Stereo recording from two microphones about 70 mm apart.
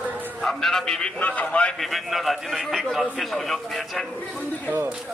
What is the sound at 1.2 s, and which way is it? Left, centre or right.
Speech, centre.